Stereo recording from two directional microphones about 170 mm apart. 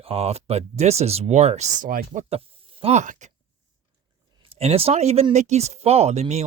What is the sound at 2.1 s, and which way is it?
Speech, 35° right (ahead or behind).